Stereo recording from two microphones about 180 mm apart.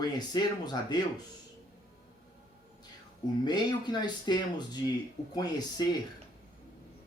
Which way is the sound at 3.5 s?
25° left (ahead or behind).